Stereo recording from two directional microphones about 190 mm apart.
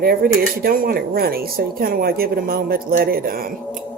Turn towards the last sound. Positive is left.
turn(degrees=-50)  # may be behind; listen again after turning